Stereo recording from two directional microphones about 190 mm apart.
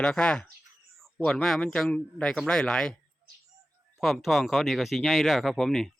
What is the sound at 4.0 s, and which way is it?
Speech, centre (ahead or behind).